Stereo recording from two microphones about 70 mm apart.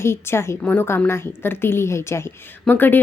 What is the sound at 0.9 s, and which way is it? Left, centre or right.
A woman's voice, left.